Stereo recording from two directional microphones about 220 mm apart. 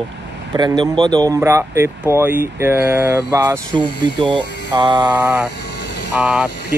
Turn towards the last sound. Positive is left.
turn(degrees=-5)  # may be behind; listen again after turning